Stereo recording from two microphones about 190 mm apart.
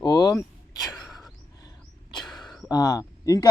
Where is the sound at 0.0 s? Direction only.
20° left (ahead or behind).